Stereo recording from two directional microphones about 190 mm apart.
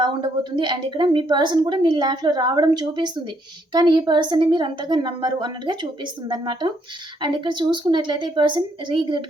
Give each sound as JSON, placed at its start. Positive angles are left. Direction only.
{"t": 0.5, "sound": "a woman's voice", "side_deg": -25}